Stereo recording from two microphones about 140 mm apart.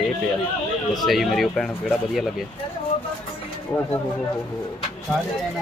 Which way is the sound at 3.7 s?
25° left (ahead or behind).